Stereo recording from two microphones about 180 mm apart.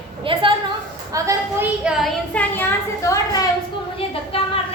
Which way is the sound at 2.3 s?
10° left (ahead or behind).